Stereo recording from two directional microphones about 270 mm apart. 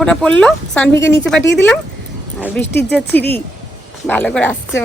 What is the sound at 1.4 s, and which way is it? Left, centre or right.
Speech, left.